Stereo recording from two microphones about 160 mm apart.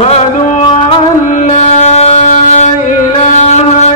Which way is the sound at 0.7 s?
30° left (ahead or behind).